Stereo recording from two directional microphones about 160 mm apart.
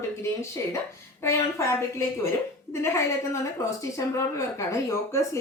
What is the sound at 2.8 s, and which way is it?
A woman's voice, 20° left (ahead or behind).